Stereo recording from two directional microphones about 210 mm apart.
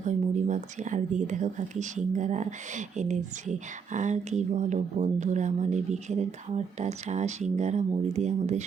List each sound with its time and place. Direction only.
0.0 s speech: 35° right (ahead or behind)